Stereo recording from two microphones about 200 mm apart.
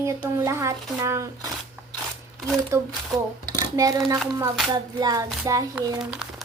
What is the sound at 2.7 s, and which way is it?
Speech, 15° right (ahead or behind).